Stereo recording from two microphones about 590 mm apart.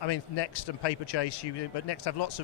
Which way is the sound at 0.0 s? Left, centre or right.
Left.